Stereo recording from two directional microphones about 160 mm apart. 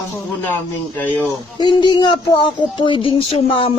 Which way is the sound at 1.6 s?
30° left (ahead or behind).